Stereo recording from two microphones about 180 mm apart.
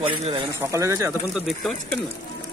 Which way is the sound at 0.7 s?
15° right (ahead or behind).